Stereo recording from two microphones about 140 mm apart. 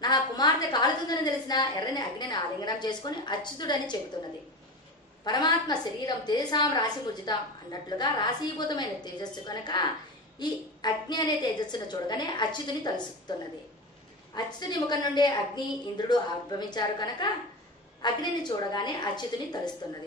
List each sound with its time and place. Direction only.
0.0 s a woman's voice: 30° left (ahead or behind)
5.2 s a woman's voice: 30° left (ahead or behind)
14.3 s a woman's voice: 30° left (ahead or behind)